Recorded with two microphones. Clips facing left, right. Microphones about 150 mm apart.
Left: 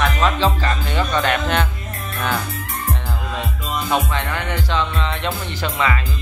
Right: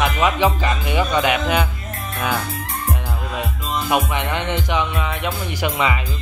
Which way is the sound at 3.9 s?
15° right (ahead or behind).